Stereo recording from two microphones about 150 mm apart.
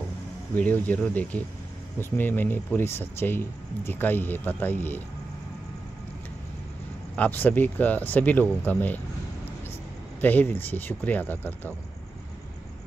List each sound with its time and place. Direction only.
0.6 s speech: 10° left (ahead or behind)
7.2 s speech: 10° left (ahead or behind)
10.2 s speech: 10° left (ahead or behind)